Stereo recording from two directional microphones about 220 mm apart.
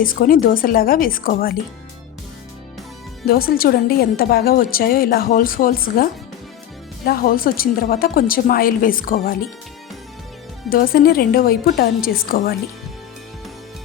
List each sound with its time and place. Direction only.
0.0 s a woman's voice: 40° left (ahead or behind)
3.2 s a woman's voice: 45° left (ahead or behind)
7.0 s a woman's voice: 45° left (ahead or behind)
10.7 s a woman's voice: 40° left (ahead or behind)